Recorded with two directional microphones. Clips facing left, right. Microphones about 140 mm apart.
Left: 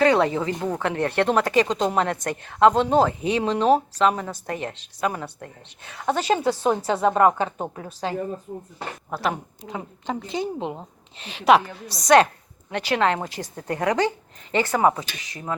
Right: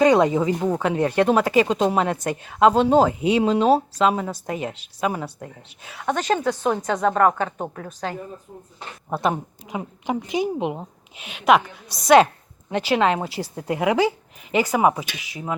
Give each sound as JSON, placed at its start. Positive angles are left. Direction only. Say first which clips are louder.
{"t": 0.0, "sound": "speech", "louder": "right 3 dB", "side_deg": -15}
{"t": 6.0, "sound": "a woman's voice", "louder": "even", "side_deg": 5}
{"t": 9.0, "sound": "speech", "louder": "right 4 dB", "side_deg": -25}
{"t": 11.2, "sound": "a woman's voice", "louder": "even", "side_deg": 0}